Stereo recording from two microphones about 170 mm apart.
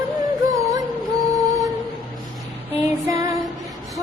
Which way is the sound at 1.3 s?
20° right (ahead or behind).